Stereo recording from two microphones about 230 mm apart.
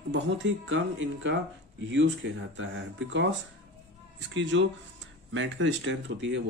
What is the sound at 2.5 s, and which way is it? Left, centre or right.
Speech, right.